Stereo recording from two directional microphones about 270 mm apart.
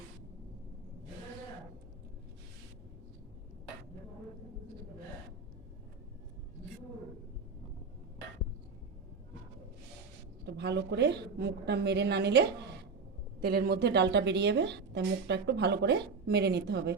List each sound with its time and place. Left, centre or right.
10.4 s a woman's voice: right